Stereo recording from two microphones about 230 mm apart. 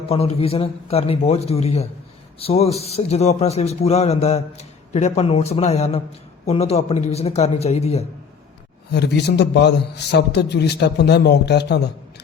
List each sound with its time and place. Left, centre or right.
0.1 s a man's voice: left
8.9 s a man's voice: left